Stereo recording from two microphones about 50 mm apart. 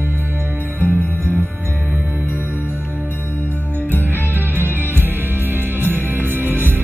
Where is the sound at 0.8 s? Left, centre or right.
Left.